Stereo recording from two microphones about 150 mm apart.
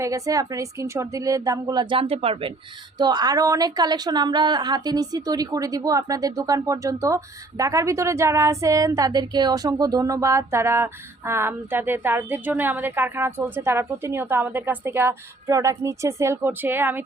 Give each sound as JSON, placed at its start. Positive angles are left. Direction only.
{"t": 0.0, "sound": "a woman's voice", "side_deg": -20}
{"t": 3.0, "sound": "a woman's voice", "side_deg": -25}